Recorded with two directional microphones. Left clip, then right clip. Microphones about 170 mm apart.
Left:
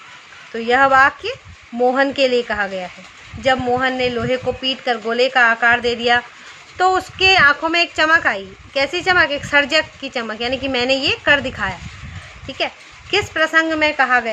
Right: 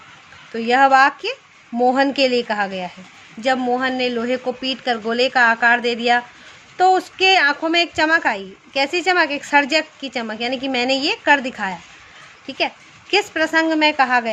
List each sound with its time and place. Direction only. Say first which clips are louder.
0.5 s a woman's voice: even; 25° right (ahead or behind)